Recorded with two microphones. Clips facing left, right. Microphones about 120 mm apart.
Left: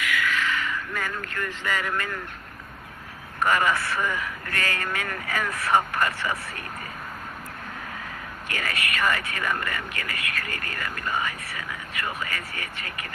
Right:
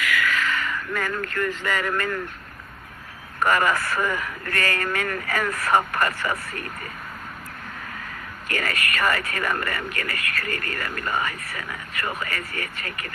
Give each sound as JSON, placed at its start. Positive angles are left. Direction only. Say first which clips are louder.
{"t": 0.4, "sound": "vehicle", "louder": "right 1 dB", "side_deg": -45}
{"t": 3.4, "sound": "speech", "louder": "right 2 dB", "side_deg": -50}
{"t": 8.4, "sound": "speech", "louder": "right 3 dB", "side_deg": -45}